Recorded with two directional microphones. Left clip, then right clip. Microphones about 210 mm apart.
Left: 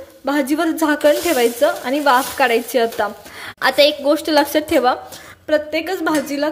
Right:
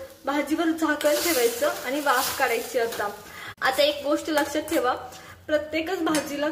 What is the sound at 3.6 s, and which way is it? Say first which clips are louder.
Sizzle: left 8 dB; 45° left (ahead or behind).